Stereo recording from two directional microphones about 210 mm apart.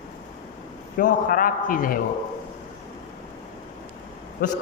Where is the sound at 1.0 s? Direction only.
40° left (ahead or behind).